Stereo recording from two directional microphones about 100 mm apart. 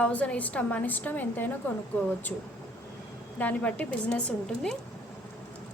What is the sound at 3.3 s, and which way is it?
A woman's voice, 15° left (ahead or behind).